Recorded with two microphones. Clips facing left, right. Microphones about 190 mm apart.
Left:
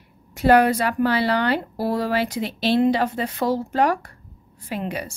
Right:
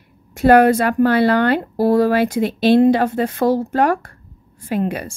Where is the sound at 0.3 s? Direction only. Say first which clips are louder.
Right 5 dB; 50° right (ahead or behind).